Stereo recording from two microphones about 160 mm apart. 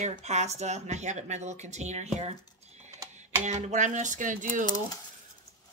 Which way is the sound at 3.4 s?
45° right (ahead or behind).